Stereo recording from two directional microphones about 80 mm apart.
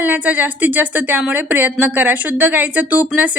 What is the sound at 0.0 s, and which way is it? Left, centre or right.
Speech, right.